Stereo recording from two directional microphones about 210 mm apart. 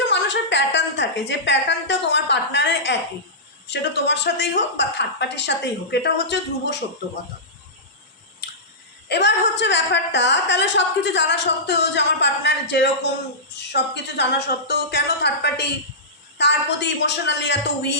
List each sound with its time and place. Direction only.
0.0 s a woman's voice: 55° left (ahead or behind)
8.4 s a sound: 50° left (ahead or behind)
9.0 s a woman's voice: 55° left (ahead or behind)